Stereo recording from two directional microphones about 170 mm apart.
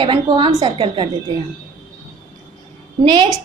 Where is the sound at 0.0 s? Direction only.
30° right (ahead or behind).